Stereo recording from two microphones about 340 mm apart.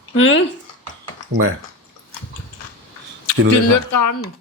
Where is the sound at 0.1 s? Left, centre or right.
Left.